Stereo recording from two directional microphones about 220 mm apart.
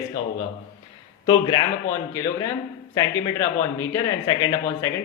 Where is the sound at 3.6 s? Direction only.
10° left (ahead or behind).